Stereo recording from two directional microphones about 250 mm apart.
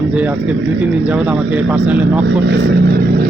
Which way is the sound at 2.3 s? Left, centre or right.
Right.